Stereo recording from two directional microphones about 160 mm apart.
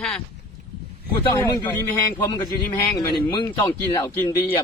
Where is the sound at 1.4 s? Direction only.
25° left (ahead or behind).